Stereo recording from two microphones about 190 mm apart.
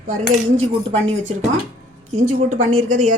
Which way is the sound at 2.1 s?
35° right (ahead or behind).